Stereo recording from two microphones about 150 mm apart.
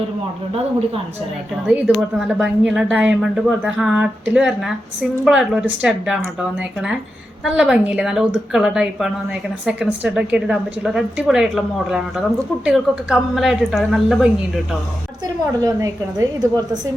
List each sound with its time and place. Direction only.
1.6 s speech: 5° right (ahead or behind)
7.4 s speech: 5° right (ahead or behind)
15.6 s a woman's voice: 25° right (ahead or behind)